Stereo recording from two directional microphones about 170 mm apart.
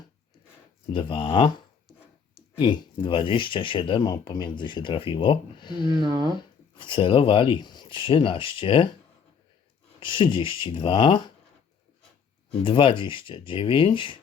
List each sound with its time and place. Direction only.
0.9 s speech: 30° left (ahead or behind)
2.6 s speech: 30° left (ahead or behind)
6.0 s speech: 25° right (ahead or behind)
6.7 s speech: 30° left (ahead or behind)
10.0 s speech: 30° left (ahead or behind)
12.6 s speech: 30° left (ahead or behind)